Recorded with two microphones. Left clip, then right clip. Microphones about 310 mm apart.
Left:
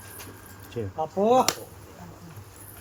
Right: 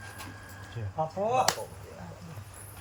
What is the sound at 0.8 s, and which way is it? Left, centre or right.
Speech, left.